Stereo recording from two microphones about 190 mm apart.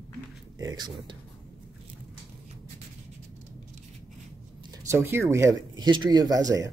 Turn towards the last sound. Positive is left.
turn(degrees=-20)  # may be behind; listen again after turning